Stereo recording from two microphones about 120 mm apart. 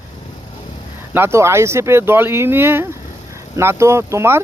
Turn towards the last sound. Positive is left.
turn(degrees=-20)  # may be behind; listen again after turning